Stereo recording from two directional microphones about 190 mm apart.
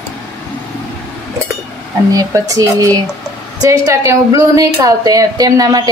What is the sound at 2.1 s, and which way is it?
A woman's voice, 20° right (ahead or behind).